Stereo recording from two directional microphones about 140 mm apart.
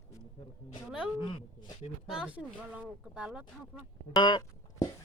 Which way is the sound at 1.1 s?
35° left (ahead or behind).